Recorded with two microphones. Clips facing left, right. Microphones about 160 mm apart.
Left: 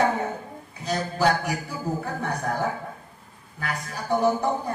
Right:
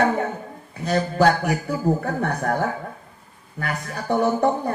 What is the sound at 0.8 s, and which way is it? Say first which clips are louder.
A man's voice: right 5 dB; 60° right (ahead or behind).